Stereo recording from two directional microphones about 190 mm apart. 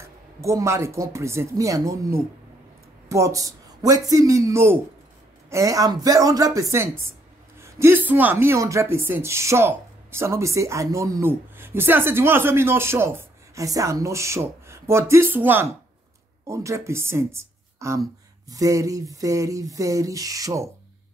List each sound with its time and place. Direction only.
0.0 s speech: 15° right (ahead or behind)